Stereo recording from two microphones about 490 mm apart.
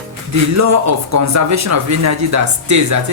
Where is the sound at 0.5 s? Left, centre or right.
Right.